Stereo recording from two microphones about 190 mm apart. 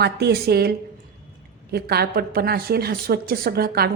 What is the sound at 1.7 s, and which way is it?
A woman's voice, 55° right (ahead or behind).